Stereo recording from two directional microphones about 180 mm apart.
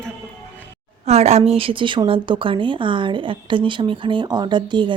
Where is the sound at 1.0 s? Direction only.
35° right (ahead or behind).